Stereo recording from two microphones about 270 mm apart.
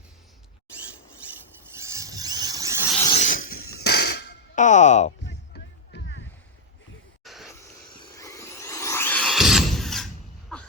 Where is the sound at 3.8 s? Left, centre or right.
Left.